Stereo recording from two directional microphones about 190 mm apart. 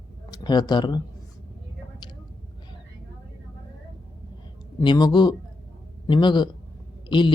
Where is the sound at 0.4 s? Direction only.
20° left (ahead or behind).